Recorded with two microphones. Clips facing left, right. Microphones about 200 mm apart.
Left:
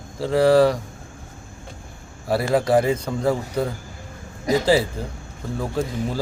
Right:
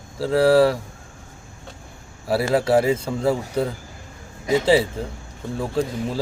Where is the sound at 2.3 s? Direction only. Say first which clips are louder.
Even; 5° right (ahead or behind).